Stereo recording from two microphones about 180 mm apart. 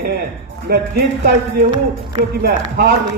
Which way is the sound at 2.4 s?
65° right (ahead or behind).